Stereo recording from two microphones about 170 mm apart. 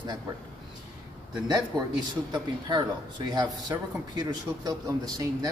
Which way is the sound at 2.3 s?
25° right (ahead or behind).